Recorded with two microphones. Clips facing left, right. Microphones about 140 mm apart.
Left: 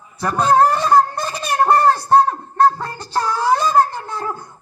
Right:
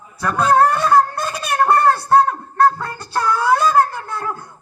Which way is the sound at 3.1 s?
20° left (ahead or behind).